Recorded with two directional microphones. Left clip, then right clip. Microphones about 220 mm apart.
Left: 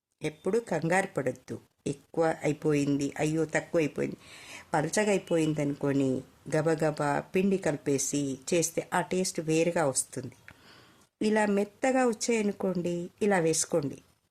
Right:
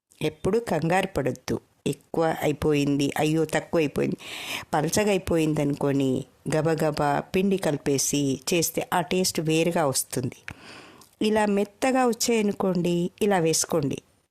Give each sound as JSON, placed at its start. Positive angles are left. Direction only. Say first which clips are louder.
{"t": 0.2, "sound": "speech", "louder": "right 5 dB", "side_deg": -40}